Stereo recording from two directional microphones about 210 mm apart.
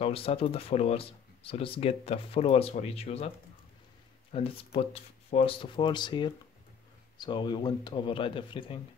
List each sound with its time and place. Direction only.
0.0 s speech: 30° left (ahead or behind)
4.3 s speech: 25° left (ahead or behind)